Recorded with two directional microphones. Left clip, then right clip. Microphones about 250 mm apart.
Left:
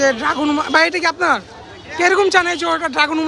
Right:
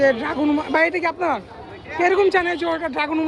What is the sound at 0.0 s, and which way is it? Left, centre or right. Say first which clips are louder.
A man's voice: left 2 dB; centre.